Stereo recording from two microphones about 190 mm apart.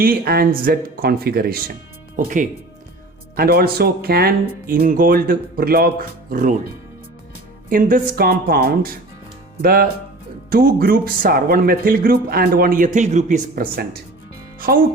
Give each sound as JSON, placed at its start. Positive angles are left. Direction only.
{"t": 0.0, "sound": "speech", "side_deg": -50}
{"t": 14.6, "sound": "speech", "side_deg": -50}